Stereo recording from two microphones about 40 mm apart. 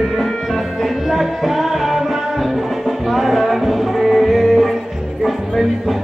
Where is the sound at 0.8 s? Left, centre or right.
Centre.